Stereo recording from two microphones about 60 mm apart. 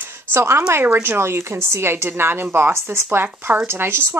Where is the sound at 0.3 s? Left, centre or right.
Right.